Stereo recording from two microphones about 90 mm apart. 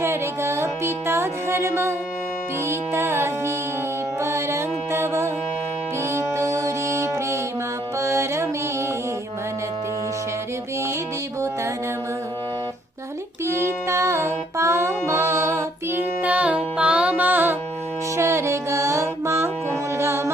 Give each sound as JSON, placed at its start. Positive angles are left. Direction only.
{"t": 0.0, "sound": "music", "side_deg": -30}
{"t": 13.6, "sound": "music", "side_deg": -30}
{"t": 16.2, "sound": "music", "side_deg": -15}